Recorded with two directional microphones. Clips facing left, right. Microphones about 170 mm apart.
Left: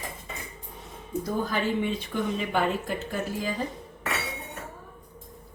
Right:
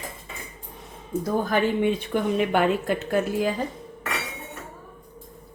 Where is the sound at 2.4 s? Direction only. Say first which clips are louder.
Right 5 dB; 65° right (ahead or behind).